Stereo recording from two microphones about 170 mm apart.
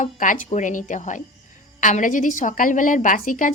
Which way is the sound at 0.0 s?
45° left (ahead or behind).